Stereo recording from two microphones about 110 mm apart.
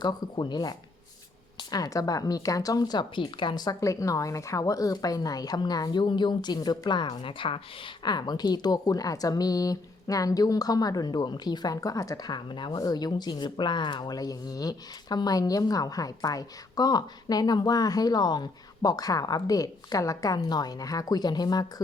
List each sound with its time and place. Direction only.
0.0 s a woman's voice: 40° left (ahead or behind)